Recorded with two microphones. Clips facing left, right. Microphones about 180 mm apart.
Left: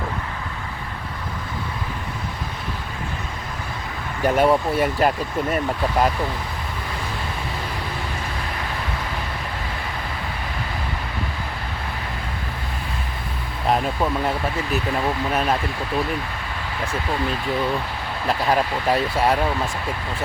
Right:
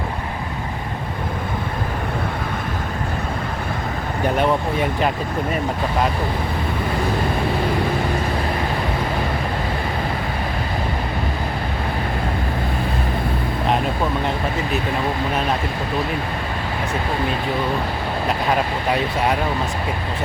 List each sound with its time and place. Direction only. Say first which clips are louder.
4.4 s speech: left 3 dB; 5° left (ahead or behind)